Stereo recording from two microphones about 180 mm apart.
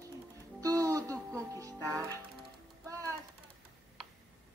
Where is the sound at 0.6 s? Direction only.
20° right (ahead or behind).